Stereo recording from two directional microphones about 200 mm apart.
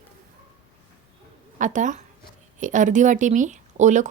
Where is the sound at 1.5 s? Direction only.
40° right (ahead or behind).